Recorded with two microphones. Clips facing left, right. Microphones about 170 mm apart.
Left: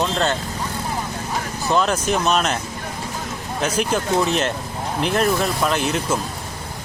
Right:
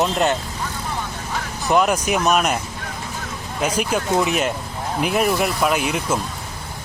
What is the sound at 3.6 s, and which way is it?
Speech, 10° right (ahead or behind).